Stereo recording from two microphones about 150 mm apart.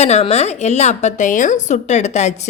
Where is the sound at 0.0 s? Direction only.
45° left (ahead or behind).